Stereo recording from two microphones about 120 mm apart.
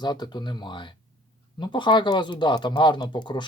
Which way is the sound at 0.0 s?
35° left (ahead or behind).